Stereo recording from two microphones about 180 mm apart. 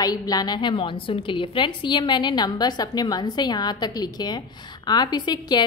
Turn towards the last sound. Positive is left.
turn(degrees=25)  # may be behind; listen again after turning